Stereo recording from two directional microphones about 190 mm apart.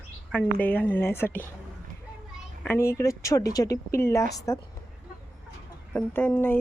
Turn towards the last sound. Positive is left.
turn(degrees=10)  # may be behind; listen again after turning